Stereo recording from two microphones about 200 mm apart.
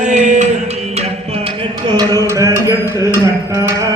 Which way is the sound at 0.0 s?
35° right (ahead or behind).